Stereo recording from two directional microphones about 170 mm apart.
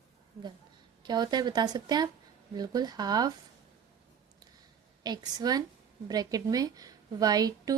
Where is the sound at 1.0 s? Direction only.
25° right (ahead or behind).